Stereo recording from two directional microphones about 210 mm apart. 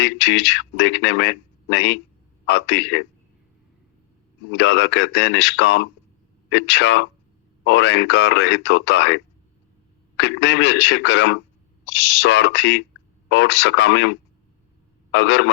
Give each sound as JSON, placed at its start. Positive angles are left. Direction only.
{"t": 0.0, "sound": "speech", "side_deg": 55}
{"t": 4.5, "sound": "speech", "side_deg": 60}
{"t": 10.2, "sound": "speech", "side_deg": 55}
{"t": 15.1, "sound": "speech", "side_deg": 60}